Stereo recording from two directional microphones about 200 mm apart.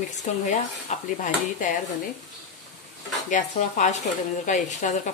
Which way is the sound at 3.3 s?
35° left (ahead or behind).